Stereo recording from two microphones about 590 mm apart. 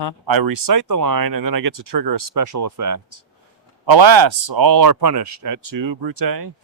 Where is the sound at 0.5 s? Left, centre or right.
Right.